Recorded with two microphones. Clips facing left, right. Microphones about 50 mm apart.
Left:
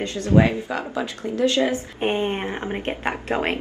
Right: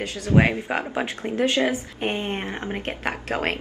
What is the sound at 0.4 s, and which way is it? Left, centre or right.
Speech, right.